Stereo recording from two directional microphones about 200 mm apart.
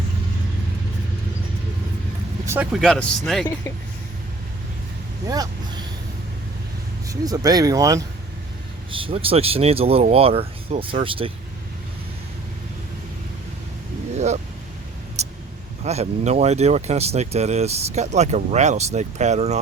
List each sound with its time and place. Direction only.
2.8 s speech: centre (ahead or behind)
5.3 s vehicle: 20° right (ahead or behind)
7.1 s speech: 20° right (ahead or behind)
15.2 s a sound: 35° right (ahead or behind)
15.8 s speech: 35° right (ahead or behind)